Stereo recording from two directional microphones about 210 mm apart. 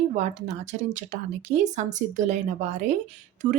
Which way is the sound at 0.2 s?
35° right (ahead or behind).